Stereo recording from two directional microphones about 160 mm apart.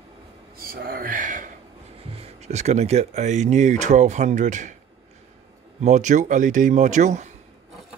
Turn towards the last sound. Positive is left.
turn(degrees=-50)  # may be behind; listen again after turning